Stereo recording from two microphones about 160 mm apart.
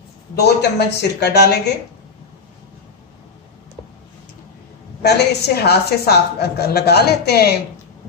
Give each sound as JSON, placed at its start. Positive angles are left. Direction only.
{"t": 0.4, "sound": "a woman's voice", "side_deg": 90}
{"t": 5.0, "sound": "a woman's voice", "side_deg": 90}